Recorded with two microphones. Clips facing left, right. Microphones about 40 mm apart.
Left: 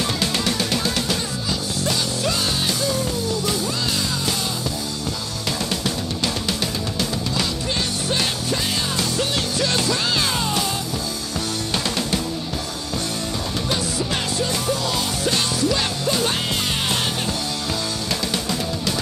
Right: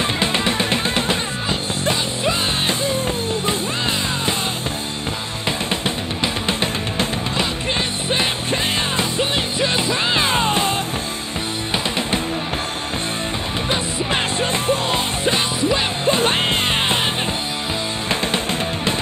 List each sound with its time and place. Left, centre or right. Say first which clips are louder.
0.0 s music: right 3 dB; right
5.9 s music: right 2 dB; right
13.7 s music: right 3 dB; right
18.3 s music: right 3 dB; right